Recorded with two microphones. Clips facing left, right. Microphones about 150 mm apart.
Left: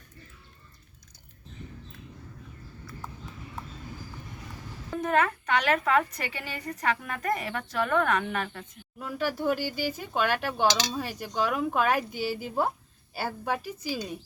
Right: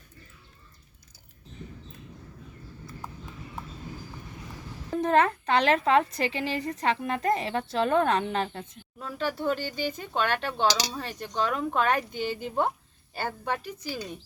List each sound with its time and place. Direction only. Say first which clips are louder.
4.9 s a woman's voice: right 3 dB; 30° right (ahead or behind)
9.0 s speech: left 1 dB; 10° left (ahead or behind)